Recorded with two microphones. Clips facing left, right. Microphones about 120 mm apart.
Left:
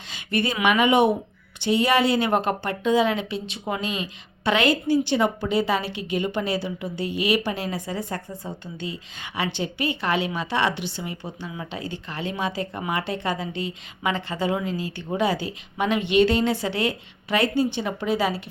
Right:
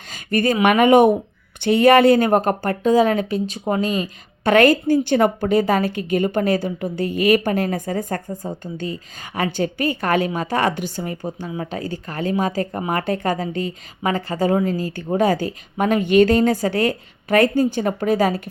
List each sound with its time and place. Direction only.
0.1 s speech: 45° right (ahead or behind)